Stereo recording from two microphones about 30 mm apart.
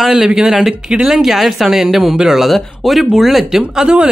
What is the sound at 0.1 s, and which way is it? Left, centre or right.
Speech, right.